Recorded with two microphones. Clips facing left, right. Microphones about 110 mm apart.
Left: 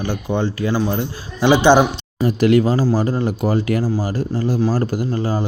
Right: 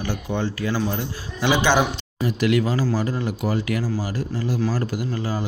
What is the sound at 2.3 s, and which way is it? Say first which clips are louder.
Speech: left 6 dB; 40° left (ahead or behind).